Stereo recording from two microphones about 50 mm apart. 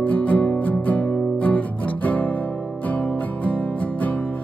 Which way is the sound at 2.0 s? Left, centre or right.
Left.